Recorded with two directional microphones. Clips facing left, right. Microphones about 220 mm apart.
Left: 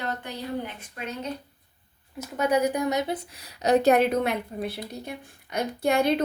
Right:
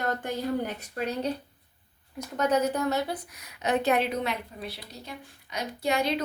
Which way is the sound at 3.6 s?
40° left (ahead or behind).